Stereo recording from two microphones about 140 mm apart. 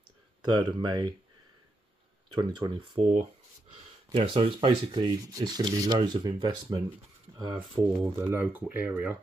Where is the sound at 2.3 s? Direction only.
30° right (ahead or behind).